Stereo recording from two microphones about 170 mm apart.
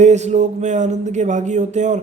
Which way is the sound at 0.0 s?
45° right (ahead or behind).